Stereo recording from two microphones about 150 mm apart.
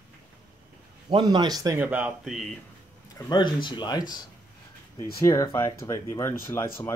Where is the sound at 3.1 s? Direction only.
30° left (ahead or behind).